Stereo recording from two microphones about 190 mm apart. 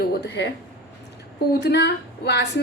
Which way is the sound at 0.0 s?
60° left (ahead or behind).